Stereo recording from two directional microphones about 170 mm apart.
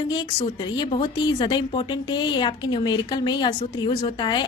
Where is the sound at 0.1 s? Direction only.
25° left (ahead or behind).